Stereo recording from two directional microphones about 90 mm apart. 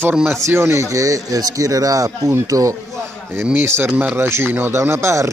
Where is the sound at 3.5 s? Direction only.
25° right (ahead or behind).